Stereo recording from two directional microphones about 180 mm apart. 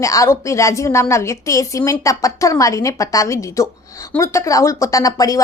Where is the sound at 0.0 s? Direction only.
15° left (ahead or behind).